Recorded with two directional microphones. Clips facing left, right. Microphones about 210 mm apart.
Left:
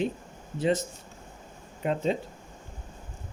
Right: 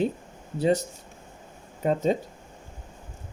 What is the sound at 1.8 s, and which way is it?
Speech, 40° right (ahead or behind).